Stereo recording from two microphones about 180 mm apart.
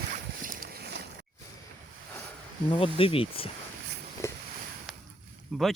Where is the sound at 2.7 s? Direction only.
30° left (ahead or behind).